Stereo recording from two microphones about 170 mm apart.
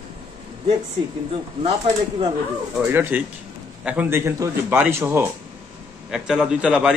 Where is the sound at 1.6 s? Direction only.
35° right (ahead or behind).